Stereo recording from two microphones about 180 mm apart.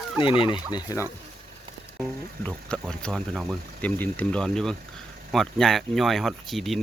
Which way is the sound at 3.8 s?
10° left (ahead or behind).